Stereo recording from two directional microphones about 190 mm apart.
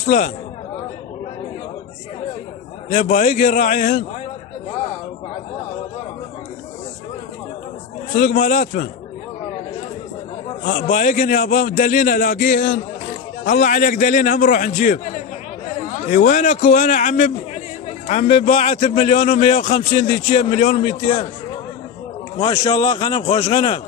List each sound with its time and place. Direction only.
0.0 s speech: 35° left (ahead or behind)
2.9 s a man's voice: 40° left (ahead or behind)
8.1 s a man's voice: 40° left (ahead or behind)
10.6 s a man's voice: 40° left (ahead or behind)
22.4 s speech: 30° left (ahead or behind)